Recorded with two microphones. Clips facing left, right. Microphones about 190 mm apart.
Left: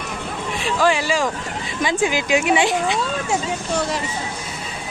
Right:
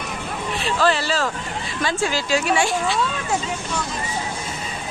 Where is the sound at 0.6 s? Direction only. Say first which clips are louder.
Left 2 dB; 15° left (ahead or behind).